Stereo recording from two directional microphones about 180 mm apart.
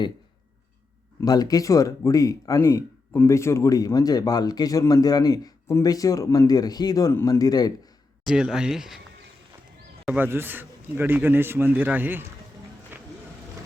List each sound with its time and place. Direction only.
1.2 s speech: 20° left (ahead or behind)
8.2 s speech: 5° right (ahead or behind)
10.1 s a man's voice: 10° right (ahead or behind)
12.9 s vehicle: 10° right (ahead or behind)